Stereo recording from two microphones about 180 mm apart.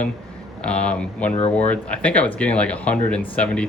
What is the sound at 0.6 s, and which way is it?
Speech, 5° left (ahead or behind).